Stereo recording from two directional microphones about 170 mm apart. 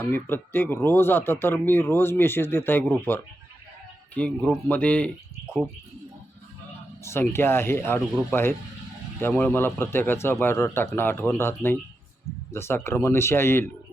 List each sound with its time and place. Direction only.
0.0 s speech: 10° left (ahead or behind)
7.0 s speech: 15° left (ahead or behind)